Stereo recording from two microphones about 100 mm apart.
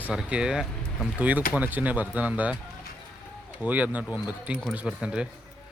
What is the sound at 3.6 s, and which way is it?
Speech, 15° right (ahead or behind).